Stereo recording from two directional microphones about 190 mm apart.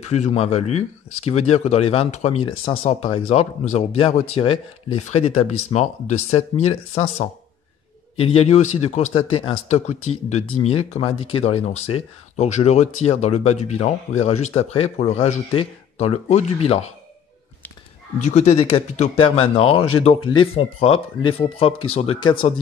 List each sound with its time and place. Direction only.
0.1 s speech: 35° left (ahead or behind)
18.2 s speech: 35° left (ahead or behind)